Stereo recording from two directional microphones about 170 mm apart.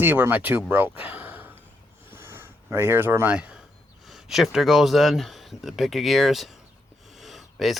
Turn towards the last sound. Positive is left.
turn(degrees=0)  # may be behind; listen again after turning